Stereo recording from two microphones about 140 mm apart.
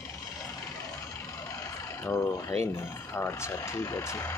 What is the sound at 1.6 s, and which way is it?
Speech, 20° left (ahead or behind).